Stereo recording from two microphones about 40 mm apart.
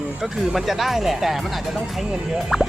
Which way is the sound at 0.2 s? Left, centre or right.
Centre.